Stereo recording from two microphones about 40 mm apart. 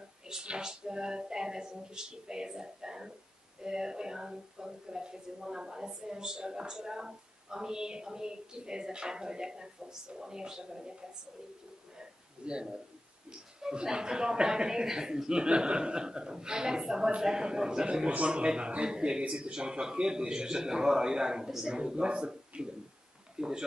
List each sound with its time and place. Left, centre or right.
0.3 s a woman's voice: centre
12.0 s a sound: right
13.3 s a woman's voice: centre